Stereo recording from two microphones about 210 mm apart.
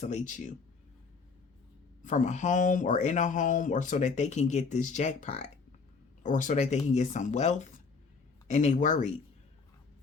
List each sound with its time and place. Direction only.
0.0 s speech: 35° left (ahead or behind)
2.0 s speech: 35° left (ahead or behind)